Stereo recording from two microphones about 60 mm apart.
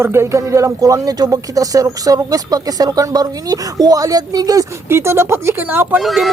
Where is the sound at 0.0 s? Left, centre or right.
Right.